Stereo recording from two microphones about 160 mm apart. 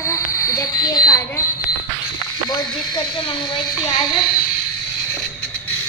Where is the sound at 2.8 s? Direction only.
30° left (ahead or behind).